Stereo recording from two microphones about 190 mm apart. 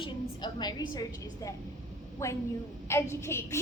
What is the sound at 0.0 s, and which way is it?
A woman's voice, 25° left (ahead or behind).